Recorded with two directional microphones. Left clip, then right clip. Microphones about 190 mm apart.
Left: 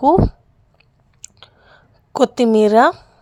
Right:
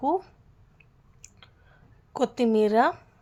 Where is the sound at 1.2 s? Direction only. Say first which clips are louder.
Left 11 dB; 40° left (ahead or behind).